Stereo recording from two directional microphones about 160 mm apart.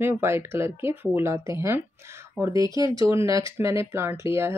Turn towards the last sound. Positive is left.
turn(degrees=-15)  # may be behind; listen again after turning